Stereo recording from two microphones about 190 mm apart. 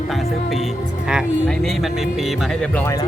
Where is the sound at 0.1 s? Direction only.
Centre (ahead or behind).